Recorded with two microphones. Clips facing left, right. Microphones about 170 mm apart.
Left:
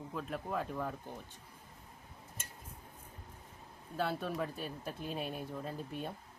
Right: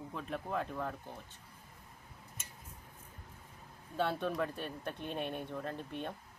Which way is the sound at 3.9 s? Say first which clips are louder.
Right 2 dB; 5° left (ahead or behind).